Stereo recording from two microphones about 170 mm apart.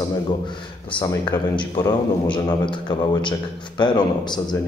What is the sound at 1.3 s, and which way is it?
Speech, 5° left (ahead or behind).